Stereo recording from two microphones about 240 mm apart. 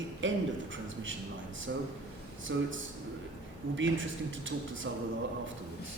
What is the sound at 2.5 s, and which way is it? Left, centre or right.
Speech, right.